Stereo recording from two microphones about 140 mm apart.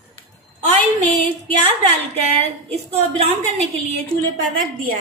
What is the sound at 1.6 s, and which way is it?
A woman's voice, 40° right (ahead or behind).